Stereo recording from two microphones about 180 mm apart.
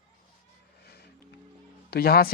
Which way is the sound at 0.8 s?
65° left (ahead or behind).